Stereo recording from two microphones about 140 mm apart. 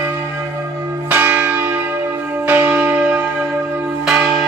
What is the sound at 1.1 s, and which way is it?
Church bell, 10° right (ahead or behind).